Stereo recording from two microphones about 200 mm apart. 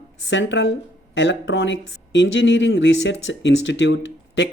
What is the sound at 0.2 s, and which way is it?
Speech, 65° left (ahead or behind).